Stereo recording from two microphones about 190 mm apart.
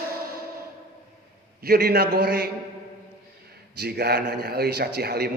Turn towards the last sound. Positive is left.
turn(degrees=-55)  # may be behind; listen again after turning